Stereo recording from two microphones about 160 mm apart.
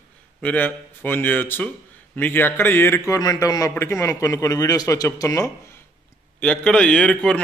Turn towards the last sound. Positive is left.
turn(degrees=5)  # may be behind; listen again after turning